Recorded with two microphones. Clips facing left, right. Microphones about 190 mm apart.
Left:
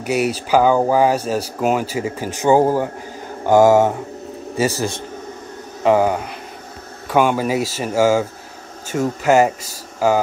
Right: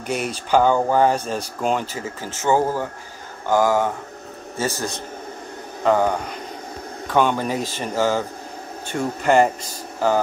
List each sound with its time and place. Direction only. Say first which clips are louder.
0.0 s speech: left 6 dB; 5° left (ahead or behind)
5.9 s speech: left 3 dB; 10° left (ahead or behind)